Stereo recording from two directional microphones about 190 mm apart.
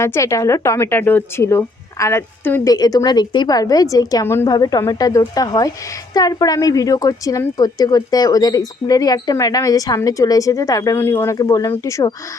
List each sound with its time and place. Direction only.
0.0 s a woman's voice: 15° left (ahead or behind)